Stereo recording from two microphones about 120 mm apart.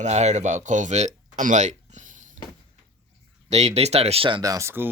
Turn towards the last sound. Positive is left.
turn(degrees=-20)  # may be behind; listen again after turning